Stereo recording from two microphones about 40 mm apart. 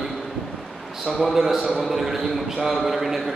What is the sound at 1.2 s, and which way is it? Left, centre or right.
A man's voice, centre.